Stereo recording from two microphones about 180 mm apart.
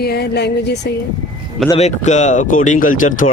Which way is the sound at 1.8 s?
40° left (ahead or behind).